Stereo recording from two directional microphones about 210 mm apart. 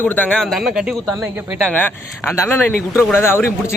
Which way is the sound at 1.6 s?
5° left (ahead or behind).